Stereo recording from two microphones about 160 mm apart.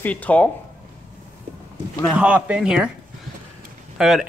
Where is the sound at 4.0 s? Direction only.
5° right (ahead or behind).